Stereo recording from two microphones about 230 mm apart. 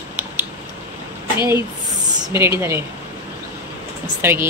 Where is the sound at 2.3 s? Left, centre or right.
Centre.